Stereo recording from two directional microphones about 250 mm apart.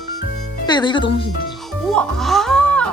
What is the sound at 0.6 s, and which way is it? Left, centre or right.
Speech, centre.